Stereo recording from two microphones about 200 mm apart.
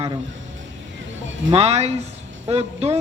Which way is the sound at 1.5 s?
30° right (ahead or behind).